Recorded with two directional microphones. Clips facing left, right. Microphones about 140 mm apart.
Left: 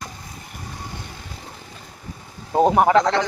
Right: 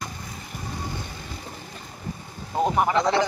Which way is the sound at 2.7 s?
80° left.